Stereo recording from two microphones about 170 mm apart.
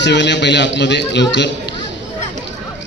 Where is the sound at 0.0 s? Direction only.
90° left.